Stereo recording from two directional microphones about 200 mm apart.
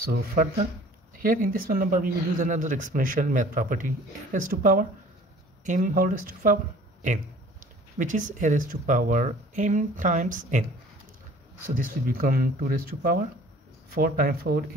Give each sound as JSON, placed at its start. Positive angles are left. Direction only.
{"t": 0.0, "sound": "speech", "side_deg": -50}
{"t": 11.6, "sound": "speech", "side_deg": -45}